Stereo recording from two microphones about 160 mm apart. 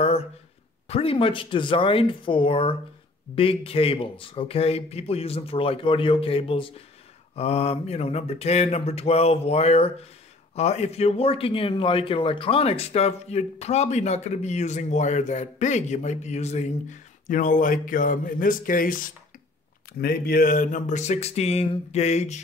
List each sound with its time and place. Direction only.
0.8 s a man's voice: 40° left (ahead or behind); by 18.9 s 60° left (ahead or behind)
19.9 s speech: 75° left (ahead or behind); by 22.4 s 45° left (ahead or behind)